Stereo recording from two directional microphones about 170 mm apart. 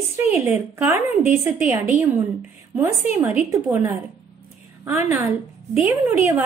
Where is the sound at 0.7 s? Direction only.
15° right (ahead or behind).